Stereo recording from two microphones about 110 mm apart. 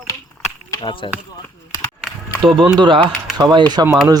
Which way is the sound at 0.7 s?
45° left (ahead or behind).